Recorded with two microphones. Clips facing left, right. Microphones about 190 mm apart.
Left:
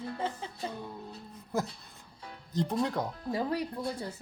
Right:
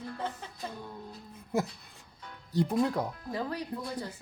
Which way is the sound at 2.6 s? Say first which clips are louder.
Right 2 dB; 5° right (ahead or behind).